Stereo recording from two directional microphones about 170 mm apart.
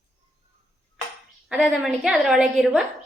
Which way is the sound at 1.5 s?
5° right (ahead or behind).